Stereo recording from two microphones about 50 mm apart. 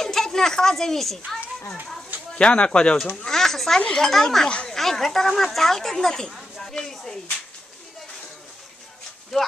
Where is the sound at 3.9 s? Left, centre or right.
Centre.